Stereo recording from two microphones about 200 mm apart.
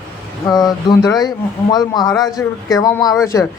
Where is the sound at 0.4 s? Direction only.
20° left (ahead or behind).